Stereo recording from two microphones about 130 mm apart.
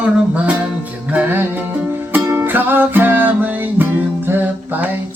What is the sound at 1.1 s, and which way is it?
Music, 15° right (ahead or behind).